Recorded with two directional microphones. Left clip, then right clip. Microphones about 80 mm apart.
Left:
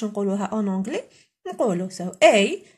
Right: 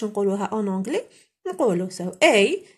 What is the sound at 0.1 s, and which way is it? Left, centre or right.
Speech, right.